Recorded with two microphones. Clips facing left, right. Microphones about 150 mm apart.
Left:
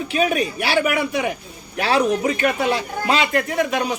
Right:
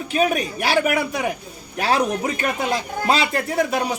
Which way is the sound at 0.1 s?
40° right (ahead or behind).